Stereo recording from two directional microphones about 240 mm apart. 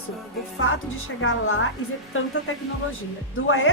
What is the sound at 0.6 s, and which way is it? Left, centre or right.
A woman's voice, left.